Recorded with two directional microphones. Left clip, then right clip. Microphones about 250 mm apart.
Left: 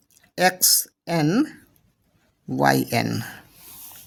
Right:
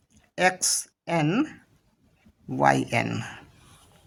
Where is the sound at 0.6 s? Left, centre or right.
Left.